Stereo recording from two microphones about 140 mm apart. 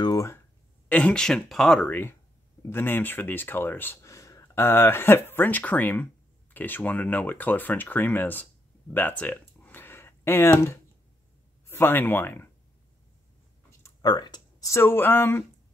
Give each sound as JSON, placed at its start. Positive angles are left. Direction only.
{"t": 0.0, "sound": "speech", "side_deg": 25}
{"t": 0.8, "sound": "speech", "side_deg": 10}
{"t": 8.9, "sound": "a sound", "side_deg": 10}
{"t": 11.6, "sound": "speech", "side_deg": 15}
{"t": 13.7, "sound": "speech", "side_deg": 25}